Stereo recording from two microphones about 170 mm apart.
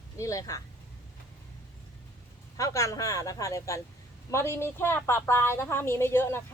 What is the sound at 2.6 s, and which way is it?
A woman's voice, 20° left (ahead or behind).